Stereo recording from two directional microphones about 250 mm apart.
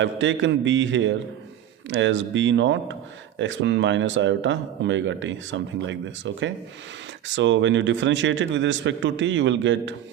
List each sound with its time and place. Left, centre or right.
0.0 s speech: right